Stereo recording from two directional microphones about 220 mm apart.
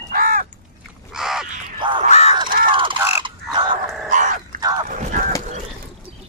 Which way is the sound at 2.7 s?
25° right (ahead or behind).